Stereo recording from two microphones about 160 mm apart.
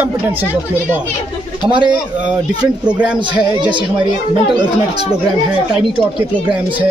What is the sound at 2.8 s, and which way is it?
Speech, 5° right (ahead or behind).